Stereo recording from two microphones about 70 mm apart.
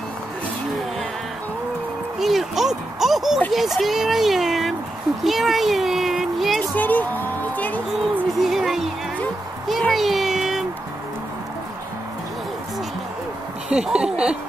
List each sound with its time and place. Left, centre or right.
2.1 s a sound: centre
3.5 s a child's voice: centre
6.7 s speech: left
8.4 s music: centre
9.9 s a sound: centre
13.7 s speech: centre